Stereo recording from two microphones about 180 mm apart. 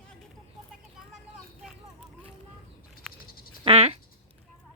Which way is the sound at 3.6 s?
35° right (ahead or behind).